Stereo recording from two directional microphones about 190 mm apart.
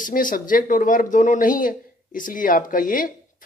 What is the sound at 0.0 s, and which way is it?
Speech, 45° left (ahead or behind).